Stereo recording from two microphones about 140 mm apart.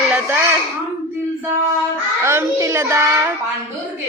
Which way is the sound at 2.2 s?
20° right (ahead or behind).